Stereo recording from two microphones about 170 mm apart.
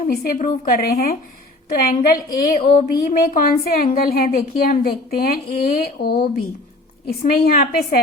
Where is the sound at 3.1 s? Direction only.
55° left (ahead or behind).